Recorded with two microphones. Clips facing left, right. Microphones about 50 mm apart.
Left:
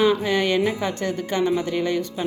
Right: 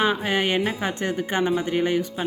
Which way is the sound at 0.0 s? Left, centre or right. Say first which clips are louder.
Left 3 dB; right.